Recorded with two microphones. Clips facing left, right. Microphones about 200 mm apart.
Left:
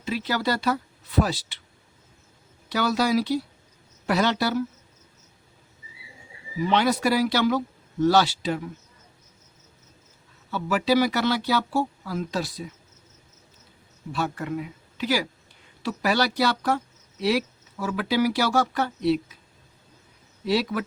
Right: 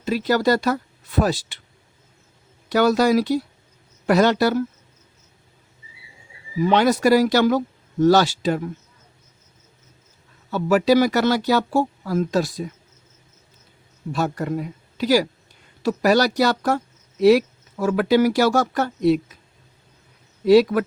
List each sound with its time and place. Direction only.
0.0 s speech: 40° right (ahead or behind)
2.6 s speech: 50° right (ahead or behind)
6.6 s speech: 50° right (ahead or behind)
10.5 s speech: 45° right (ahead or behind)
14.1 s speech: 40° right (ahead or behind)
20.5 s speech: 50° right (ahead or behind)